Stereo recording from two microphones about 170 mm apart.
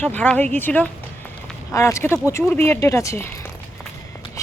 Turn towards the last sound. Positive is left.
turn(degrees=20)  # may be behind; listen again after turning